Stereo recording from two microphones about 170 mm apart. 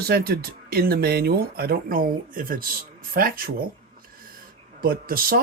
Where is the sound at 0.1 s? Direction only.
65° right (ahead or behind).